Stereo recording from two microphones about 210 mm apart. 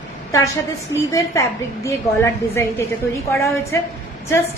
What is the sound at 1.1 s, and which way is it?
A woman's voice, 15° left (ahead or behind).